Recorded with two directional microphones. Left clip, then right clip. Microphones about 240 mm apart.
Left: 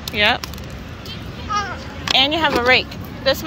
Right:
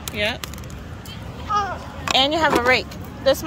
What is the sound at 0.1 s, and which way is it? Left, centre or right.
Speech, centre.